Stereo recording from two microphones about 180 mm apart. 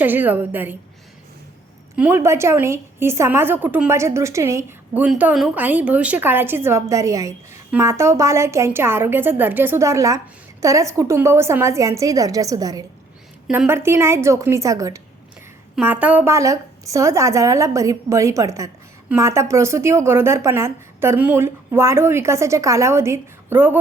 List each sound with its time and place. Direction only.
0.0 s a woman's voice: 10° right (ahead or behind)
2.0 s a woman's voice: 10° right (ahead or behind)